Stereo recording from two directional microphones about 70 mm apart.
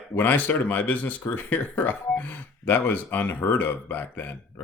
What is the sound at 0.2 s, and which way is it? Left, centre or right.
Speech, left.